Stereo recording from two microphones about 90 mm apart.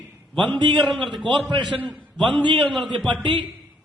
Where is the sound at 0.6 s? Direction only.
70° right (ahead or behind).